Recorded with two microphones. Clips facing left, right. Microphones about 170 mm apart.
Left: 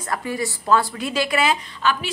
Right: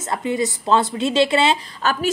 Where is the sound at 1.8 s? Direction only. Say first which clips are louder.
Even; 40° right (ahead or behind).